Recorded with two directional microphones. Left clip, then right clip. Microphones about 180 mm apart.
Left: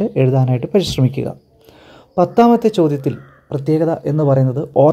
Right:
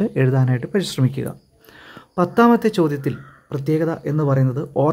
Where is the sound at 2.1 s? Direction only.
5° left (ahead or behind).